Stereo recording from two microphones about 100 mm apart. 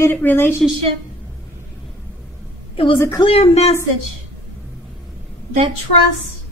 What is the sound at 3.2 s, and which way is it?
Speech, 80° left.